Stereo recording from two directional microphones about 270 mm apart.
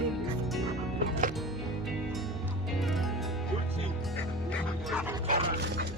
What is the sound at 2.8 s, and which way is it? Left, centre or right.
Music, centre.